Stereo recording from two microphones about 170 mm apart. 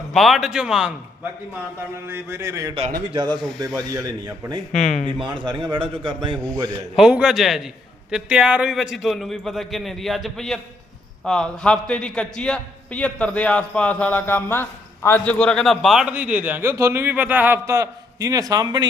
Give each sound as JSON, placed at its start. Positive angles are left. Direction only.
{"t": 0.1, "sound": "a man's voice", "side_deg": 0}
{"t": 3.1, "sound": "a man's voice", "side_deg": -30}
{"t": 4.7, "sound": "speech", "side_deg": 45}
{"t": 5.3, "sound": "a man's voice", "side_deg": -25}
{"t": 6.9, "sound": "a man's voice", "side_deg": -5}